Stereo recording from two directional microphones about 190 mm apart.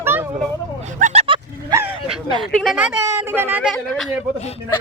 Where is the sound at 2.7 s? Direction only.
10° right (ahead or behind).